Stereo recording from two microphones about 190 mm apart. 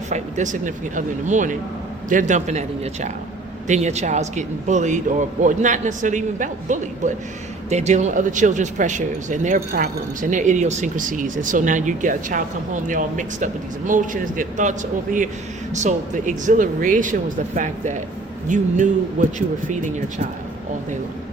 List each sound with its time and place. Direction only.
0.1 s speech: 40° right (ahead or behind)